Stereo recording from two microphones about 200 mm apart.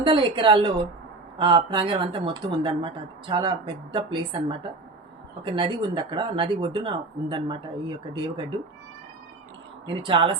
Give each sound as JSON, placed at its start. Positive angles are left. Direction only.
{"t": 0.0, "sound": "speech", "side_deg": -25}
{"t": 9.8, "sound": "speech", "side_deg": -25}